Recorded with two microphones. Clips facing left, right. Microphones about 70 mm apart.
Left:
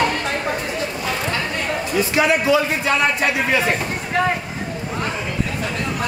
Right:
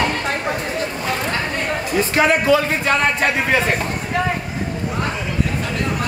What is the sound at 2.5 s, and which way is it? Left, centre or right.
Speech, right.